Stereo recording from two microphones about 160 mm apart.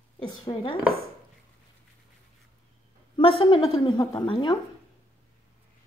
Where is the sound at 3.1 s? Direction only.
35° left (ahead or behind).